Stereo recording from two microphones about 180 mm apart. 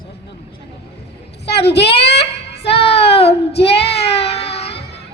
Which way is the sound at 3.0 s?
35° left (ahead or behind).